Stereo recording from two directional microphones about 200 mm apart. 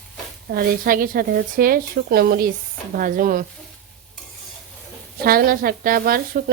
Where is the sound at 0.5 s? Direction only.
45° right (ahead or behind).